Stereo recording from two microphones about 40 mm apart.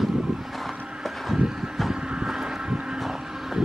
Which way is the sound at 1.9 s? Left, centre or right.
Right.